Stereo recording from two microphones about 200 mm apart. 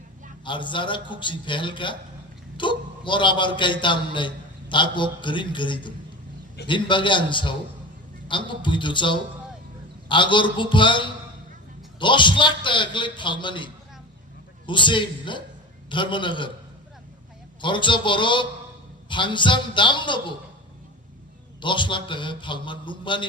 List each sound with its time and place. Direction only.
0.4 s a man's voice: 25° left (ahead or behind)
14.7 s a man's voice: 25° left (ahead or behind)
17.6 s a man's voice: 25° left (ahead or behind)
21.6 s a man's voice: 25° left (ahead or behind)